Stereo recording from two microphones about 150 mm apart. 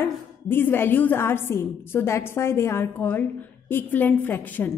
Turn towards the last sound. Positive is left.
turn(degrees=10)  # may be behind; listen again after turning